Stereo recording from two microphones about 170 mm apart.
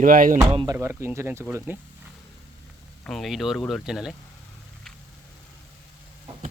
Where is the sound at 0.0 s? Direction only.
50° right (ahead or behind).